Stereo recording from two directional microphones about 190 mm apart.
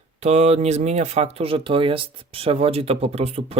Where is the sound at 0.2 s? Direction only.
35° right (ahead or behind).